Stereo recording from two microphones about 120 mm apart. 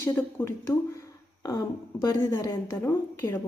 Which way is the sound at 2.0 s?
25° left (ahead or behind).